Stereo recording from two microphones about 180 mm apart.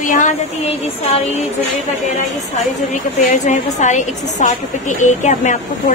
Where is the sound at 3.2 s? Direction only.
45° left (ahead or behind).